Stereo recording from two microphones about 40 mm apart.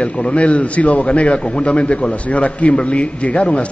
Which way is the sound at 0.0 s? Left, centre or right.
Left.